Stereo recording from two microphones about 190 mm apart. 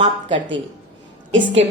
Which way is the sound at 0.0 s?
25° right (ahead or behind).